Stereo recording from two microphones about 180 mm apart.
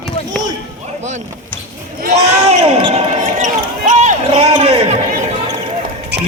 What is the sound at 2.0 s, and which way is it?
Basketball bounce, 40° right (ahead or behind).